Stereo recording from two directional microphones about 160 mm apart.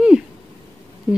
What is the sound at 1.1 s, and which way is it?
Speech, centre (ahead or behind).